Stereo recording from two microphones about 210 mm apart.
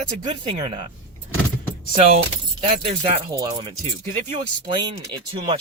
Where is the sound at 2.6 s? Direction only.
30° right (ahead or behind).